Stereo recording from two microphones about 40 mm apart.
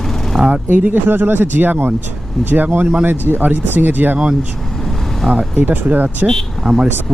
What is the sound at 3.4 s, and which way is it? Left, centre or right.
Speech, right.